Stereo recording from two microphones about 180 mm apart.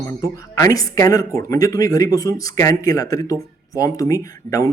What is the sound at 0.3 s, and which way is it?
Speech, 20° left (ahead or behind).